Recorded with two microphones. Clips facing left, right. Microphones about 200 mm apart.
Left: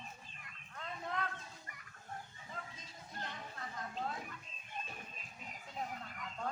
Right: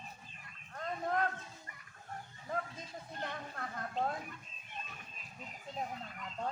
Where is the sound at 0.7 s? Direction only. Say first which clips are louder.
Right 7 dB; 45° right (ahead or behind).